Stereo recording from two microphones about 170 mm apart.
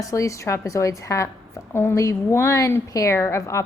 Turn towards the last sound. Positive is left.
turn(degrees=15)  # may be behind; listen again after turning